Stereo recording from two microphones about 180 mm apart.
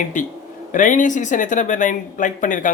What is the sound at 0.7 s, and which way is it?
Speech, 45° left (ahead or behind).